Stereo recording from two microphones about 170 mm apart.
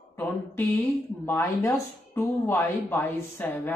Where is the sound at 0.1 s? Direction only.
10° left (ahead or behind).